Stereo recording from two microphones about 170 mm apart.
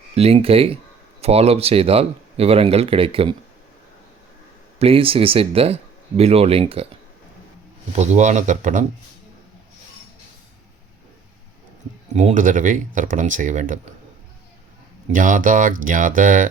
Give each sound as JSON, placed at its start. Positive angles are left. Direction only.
{"t": 0.1, "sound": "speech", "side_deg": -35}
{"t": 4.8, "sound": "speech", "side_deg": -35}
{"t": 7.9, "sound": "speech", "side_deg": -45}
{"t": 12.1, "sound": "speech", "side_deg": -45}
{"t": 15.1, "sound": "speech", "side_deg": -50}